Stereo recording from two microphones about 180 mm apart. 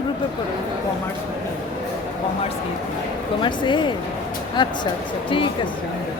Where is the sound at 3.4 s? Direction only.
25° left (ahead or behind).